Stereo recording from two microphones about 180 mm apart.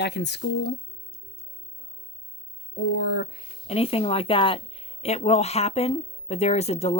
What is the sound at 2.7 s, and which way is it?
Speech, 75° left (ahead or behind).